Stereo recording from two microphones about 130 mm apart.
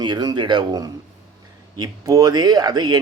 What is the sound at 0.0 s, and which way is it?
Speech, 35° right (ahead or behind).